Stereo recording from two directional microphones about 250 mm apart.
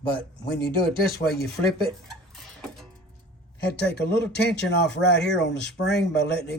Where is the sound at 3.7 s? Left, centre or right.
Left.